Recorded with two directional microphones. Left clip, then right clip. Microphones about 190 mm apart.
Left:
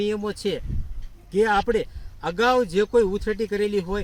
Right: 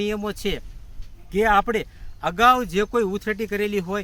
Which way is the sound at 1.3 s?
10° right (ahead or behind).